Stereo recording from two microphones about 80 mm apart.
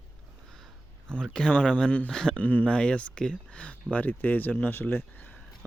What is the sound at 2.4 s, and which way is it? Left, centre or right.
Speech, centre.